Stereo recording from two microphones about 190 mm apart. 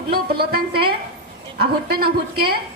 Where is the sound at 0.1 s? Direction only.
55° right (ahead or behind).